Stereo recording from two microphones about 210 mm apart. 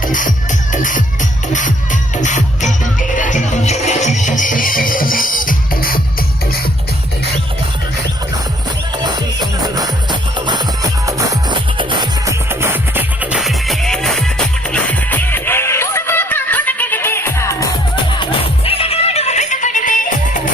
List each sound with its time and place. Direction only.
0.1 s music: 40° left (ahead or behind)
9.0 s music: 20° right (ahead or behind); by 20.5 s 40° left (ahead or behind)